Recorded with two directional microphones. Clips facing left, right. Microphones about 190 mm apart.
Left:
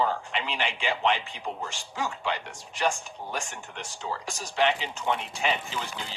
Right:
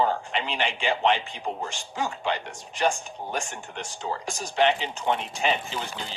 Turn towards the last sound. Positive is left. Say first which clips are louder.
# right 2 dB
turn(degrees=-30)  # may be behind; listen again after turning